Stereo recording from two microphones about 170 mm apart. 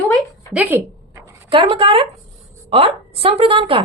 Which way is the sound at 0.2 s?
10° right (ahead or behind).